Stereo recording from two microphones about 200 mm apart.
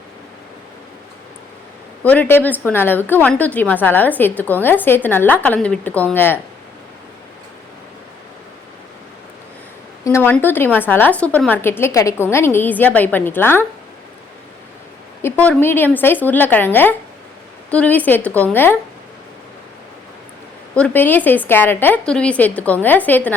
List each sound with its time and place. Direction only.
2.0 s a woman's voice: 10° left (ahead or behind)
10.0 s a woman's voice: 15° left (ahead or behind)
15.2 s a woman's voice: 10° left (ahead or behind)
20.7 s a woman's voice: 10° left (ahead or behind)